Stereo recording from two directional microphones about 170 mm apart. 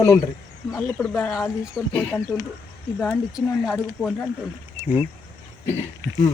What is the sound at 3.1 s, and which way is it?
Speech, 5° right (ahead or behind).